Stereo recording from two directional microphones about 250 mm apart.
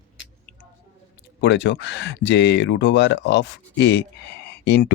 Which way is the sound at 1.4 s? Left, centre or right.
Left.